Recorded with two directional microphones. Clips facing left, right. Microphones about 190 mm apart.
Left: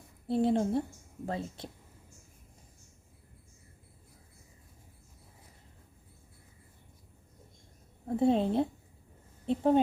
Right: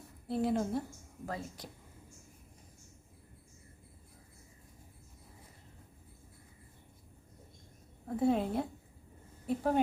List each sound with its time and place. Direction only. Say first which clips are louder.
0.3 s a woman's voice: left 4 dB; 25° left (ahead or behind)
8.0 s a woman's voice: left 4 dB; 25° left (ahead or behind)